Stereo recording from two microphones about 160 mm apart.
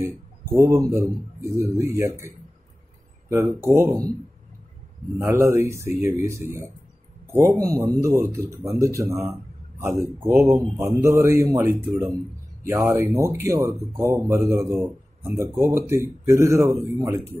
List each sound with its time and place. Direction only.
0.6 s speech: 20° right (ahead or behind)
5.2 s speech: 15° right (ahead or behind)